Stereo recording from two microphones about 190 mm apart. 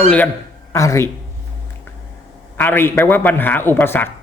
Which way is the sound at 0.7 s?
15° left (ahead or behind).